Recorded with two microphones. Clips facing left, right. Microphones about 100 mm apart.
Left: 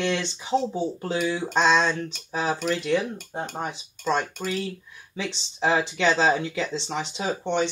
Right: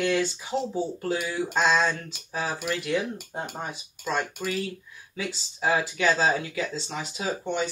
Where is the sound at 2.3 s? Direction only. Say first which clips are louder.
Left 4 dB; 20° left (ahead or behind).